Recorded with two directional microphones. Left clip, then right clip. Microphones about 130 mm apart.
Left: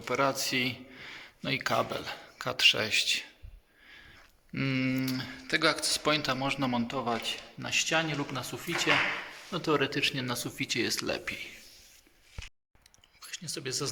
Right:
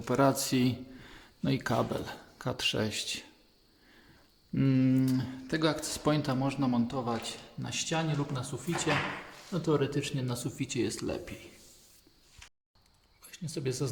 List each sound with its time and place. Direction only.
0.0 s a sound: 55° right (ahead or behind)
1.5 s speech: 35° right (ahead or behind)
4.5 s speech: 25° right (ahead or behind)
6.6 s speech: 15° left (ahead or behind)
13.2 s speech: 10° right (ahead or behind)